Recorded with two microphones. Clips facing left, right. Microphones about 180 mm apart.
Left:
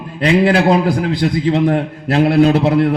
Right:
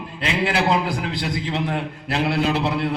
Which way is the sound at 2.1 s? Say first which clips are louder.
Left 10 dB; 50° left (ahead or behind).